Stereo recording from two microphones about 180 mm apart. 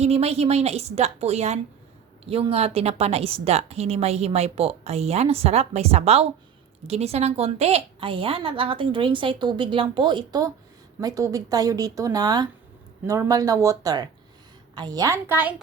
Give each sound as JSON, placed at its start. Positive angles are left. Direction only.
{"t": 0.0, "sound": "a woman's voice", "side_deg": -35}